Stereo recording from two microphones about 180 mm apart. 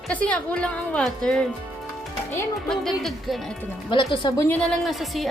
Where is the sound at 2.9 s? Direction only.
Centre (ahead or behind).